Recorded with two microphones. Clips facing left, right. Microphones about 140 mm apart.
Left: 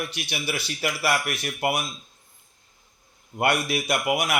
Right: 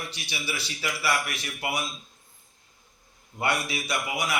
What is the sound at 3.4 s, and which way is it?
Speech, 55° left (ahead or behind).